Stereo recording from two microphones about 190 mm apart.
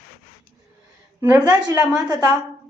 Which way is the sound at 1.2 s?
15° right (ahead or behind).